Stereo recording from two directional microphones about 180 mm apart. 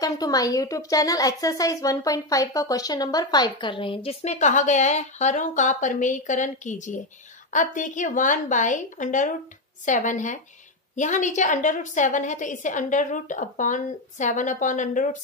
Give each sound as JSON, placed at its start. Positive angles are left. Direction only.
{"t": 0.0, "sound": "a woman's voice", "side_deg": 20}